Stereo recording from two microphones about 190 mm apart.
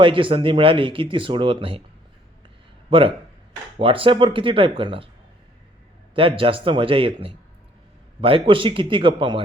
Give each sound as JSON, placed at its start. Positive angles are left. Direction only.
{"t": 0.0, "sound": "speech", "side_deg": -25}
{"t": 2.9, "sound": "speech", "side_deg": -25}
{"t": 6.1, "sound": "speech", "side_deg": -30}